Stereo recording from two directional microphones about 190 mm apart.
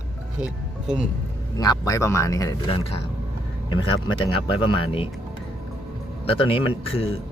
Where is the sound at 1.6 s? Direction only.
20° left (ahead or behind).